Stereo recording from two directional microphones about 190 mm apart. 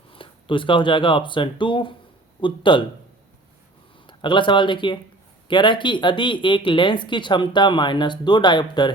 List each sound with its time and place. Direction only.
0.1 s speech: 25° left (ahead or behind)
4.0 s speech: 25° left (ahead or behind)